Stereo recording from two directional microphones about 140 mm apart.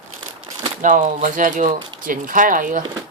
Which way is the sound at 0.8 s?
65° right (ahead or behind).